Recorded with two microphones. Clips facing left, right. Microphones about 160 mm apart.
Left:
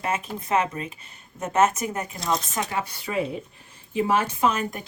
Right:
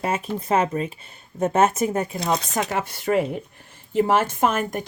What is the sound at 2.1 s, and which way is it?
Speech, 60° right (ahead or behind).